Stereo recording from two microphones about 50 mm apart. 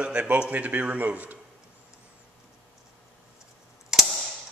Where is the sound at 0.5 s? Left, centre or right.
Right.